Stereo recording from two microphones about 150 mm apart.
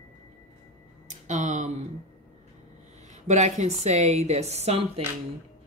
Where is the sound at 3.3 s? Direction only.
50° right (ahead or behind).